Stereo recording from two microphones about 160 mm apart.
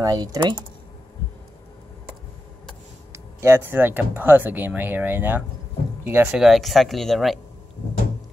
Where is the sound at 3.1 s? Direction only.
15° right (ahead or behind).